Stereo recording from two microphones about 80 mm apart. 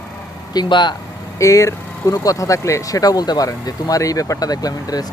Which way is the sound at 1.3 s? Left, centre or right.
Left.